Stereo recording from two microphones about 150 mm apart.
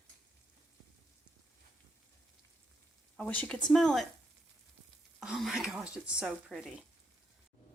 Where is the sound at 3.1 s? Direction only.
10° left (ahead or behind).